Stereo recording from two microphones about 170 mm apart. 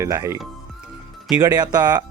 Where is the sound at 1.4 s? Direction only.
20° right (ahead or behind).